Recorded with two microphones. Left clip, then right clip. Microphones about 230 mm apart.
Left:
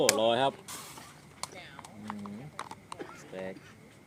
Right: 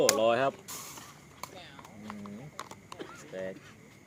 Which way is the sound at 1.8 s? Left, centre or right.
Left.